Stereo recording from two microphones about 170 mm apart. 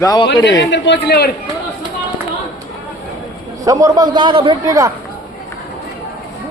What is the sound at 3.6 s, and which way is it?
A man's voice, 20° right (ahead or behind).